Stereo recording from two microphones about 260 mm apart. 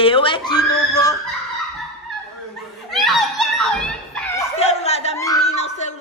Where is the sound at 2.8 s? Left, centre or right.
Centre.